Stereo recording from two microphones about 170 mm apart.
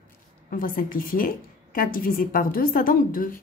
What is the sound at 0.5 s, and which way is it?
A woman's voice, 55° left (ahead or behind).